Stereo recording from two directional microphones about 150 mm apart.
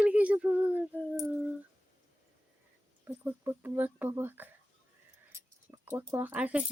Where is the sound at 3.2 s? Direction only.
15° right (ahead or behind).